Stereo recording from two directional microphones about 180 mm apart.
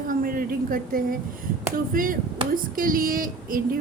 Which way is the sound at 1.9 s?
50° right (ahead or behind).